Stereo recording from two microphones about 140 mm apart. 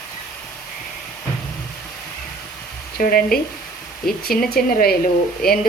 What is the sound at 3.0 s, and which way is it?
Speech, 90° left.